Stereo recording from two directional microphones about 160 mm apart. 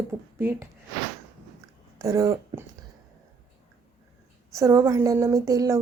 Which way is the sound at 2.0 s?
20° right (ahead or behind).